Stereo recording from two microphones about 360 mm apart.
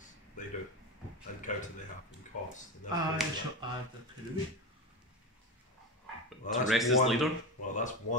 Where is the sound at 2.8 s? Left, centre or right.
Left.